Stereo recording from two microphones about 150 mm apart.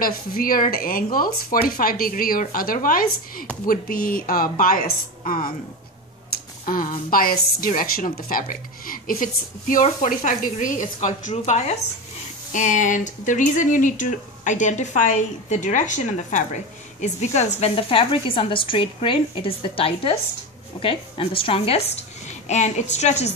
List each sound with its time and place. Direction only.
0.0 s speech: 75° left (ahead or behind)
6.6 s a woman's voice: 70° left (ahead or behind); by 23.3 s 50° left (ahead or behind)